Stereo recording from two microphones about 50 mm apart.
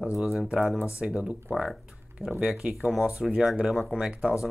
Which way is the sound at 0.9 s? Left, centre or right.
Right.